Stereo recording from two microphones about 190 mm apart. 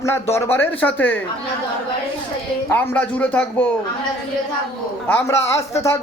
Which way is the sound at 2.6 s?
10° left (ahead or behind).